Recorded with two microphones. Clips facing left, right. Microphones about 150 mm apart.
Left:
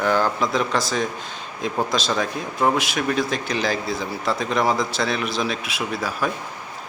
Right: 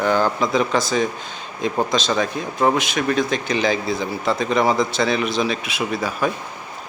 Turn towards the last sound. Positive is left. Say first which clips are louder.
# right 3 dB
turn(degrees=0)  # may be behind; listen again after turning